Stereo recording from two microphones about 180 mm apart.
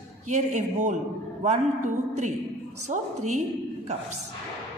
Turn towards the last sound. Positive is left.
turn(degrees=-40)  # may be behind; listen again after turning